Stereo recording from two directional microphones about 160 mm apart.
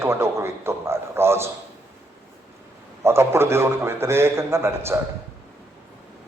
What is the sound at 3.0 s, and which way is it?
A man's voice, 15° right (ahead or behind).